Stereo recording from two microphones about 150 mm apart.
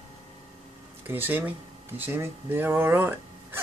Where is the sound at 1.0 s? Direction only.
15° right (ahead or behind).